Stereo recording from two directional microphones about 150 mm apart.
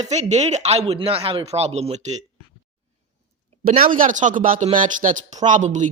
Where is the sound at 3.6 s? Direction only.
75° right (ahead or behind); by 5.9 s 55° right (ahead or behind).